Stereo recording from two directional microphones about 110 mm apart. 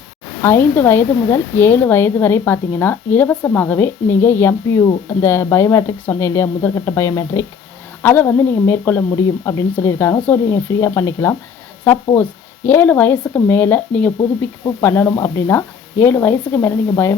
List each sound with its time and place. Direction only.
0.4 s a woman's voice: 20° left (ahead or behind)